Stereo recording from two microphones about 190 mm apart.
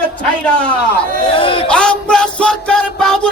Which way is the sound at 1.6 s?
5° left (ahead or behind).